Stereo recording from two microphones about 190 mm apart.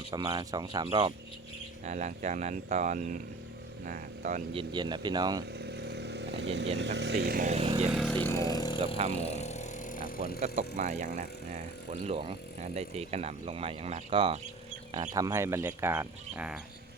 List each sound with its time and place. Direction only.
0.1 s speech: 25° right (ahead or behind)
1.8 s speech: 40° right (ahead or behind)
4.5 s speech: 25° right (ahead or behind)
5.5 s chainsaw: 60° right (ahead or behind)
6.7 s speech: 65° right (ahead or behind)
7.5 s speech: 30° right (ahead or behind)
8.1 s vehicle: 10° left (ahead or behind)
9.1 s vehicle: 35° left (ahead or behind); by 10.4 s 50° left (ahead or behind)
10.4 s speech: 40° right (ahead or behind)
15.1 s speech: 20° right (ahead or behind)